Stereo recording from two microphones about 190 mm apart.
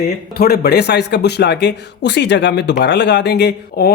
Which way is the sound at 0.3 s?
55° left (ahead or behind).